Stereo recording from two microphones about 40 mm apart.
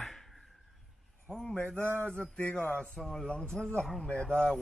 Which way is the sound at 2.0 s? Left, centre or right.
Left.